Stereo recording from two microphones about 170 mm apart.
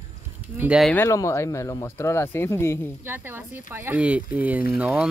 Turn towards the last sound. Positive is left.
turn(degrees=-5)  # may be behind; listen again after turning